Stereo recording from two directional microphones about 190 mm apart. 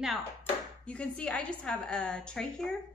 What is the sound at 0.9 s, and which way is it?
Music, 5° left (ahead or behind).